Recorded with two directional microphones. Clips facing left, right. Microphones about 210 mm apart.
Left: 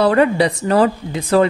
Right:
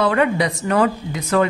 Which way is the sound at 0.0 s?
35° left (ahead or behind).